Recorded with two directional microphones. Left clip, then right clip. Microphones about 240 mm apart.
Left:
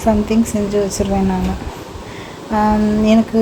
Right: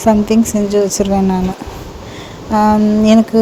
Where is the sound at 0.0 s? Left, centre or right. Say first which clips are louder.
Right 4 dB; right.